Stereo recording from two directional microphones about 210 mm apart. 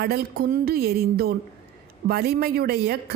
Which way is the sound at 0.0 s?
45° right (ahead or behind).